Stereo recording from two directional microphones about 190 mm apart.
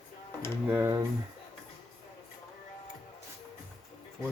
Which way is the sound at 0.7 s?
10° right (ahead or behind).